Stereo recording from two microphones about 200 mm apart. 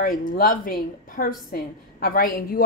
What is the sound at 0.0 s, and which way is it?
A woman's voice, 45° left (ahead or behind).